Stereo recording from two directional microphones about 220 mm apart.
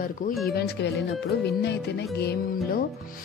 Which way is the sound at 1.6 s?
50° left (ahead or behind).